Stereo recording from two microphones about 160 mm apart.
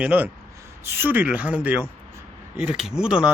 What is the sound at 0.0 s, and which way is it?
Speech, 10° right (ahead or behind).